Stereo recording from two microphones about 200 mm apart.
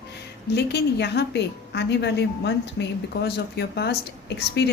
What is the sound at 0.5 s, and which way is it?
A woman's voice, 60° left (ahead or behind).